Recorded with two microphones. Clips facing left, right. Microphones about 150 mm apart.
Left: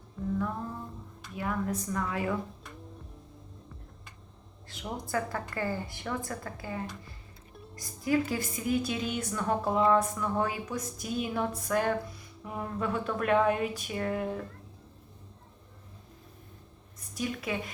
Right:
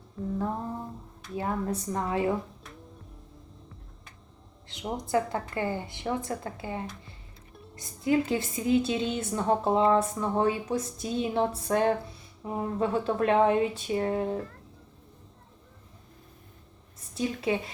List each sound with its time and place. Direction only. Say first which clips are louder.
1.4 s a woman's voice: right 2 dB; 30° right (ahead or behind)
4.7 s a woman's voice: right 5 dB; 20° right (ahead or behind)
17.2 s a woman's voice: right 5 dB; 30° right (ahead or behind)